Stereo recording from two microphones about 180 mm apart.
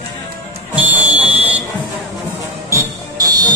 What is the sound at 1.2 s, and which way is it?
Buzzer, 10° right (ahead or behind).